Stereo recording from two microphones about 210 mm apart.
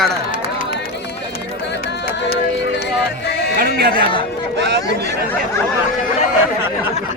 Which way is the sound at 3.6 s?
45° right (ahead or behind).